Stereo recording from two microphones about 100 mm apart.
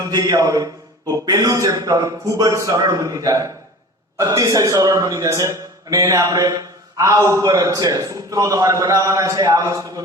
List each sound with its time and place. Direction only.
0.1 s a man's voice: 40° right (ahead or behind)